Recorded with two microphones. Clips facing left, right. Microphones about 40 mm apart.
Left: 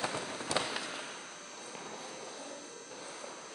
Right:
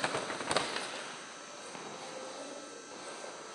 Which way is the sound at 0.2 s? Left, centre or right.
Right.